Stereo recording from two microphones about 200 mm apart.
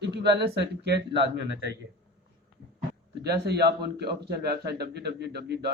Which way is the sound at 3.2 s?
55° right (ahead or behind).